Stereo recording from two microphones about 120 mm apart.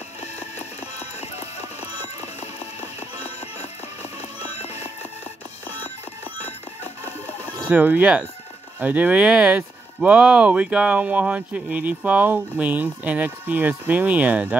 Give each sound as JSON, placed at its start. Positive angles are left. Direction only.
{"t": 0.2, "sound": "a sound", "side_deg": 65}
{"t": 1.2, "sound": "clip-clop", "side_deg": 60}
{"t": 2.4, "sound": "music", "side_deg": 65}
{"t": 6.8, "sound": "music", "side_deg": 15}
{"t": 7.7, "sound": "speech", "side_deg": -15}